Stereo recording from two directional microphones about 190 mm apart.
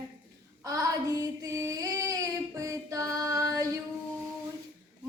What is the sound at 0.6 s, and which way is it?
Child singing, 20° right (ahead or behind).